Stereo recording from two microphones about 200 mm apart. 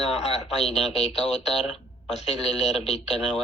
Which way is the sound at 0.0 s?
30° left (ahead or behind).